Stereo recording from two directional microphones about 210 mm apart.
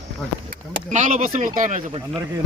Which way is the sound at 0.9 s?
35° right (ahead or behind).